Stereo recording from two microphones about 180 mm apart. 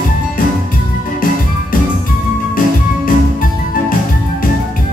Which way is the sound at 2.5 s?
50° left (ahead or behind).